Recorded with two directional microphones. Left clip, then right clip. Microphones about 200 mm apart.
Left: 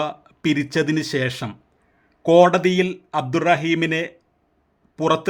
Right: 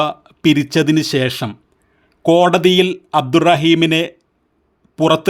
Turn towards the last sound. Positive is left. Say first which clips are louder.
# right 6 dB
turn(degrees=-20)  # may be behind; listen again after turning